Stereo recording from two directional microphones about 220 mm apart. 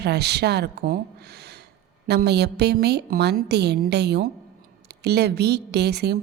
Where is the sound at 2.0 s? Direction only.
50° right (ahead or behind).